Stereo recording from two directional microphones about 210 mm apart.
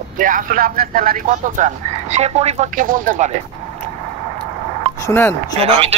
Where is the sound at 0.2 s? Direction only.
40° right (ahead or behind).